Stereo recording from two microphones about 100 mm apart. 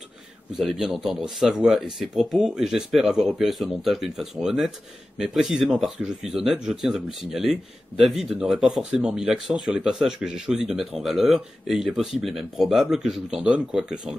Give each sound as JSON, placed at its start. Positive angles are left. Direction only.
{"t": 0.6, "sound": "speech", "side_deg": -5}